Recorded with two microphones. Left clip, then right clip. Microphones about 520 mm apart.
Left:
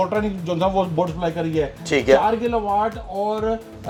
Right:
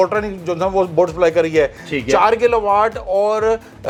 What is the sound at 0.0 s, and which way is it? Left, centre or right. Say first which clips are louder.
Speech: right 5 dB; right.